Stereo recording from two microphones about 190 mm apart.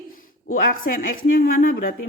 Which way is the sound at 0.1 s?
50° left (ahead or behind).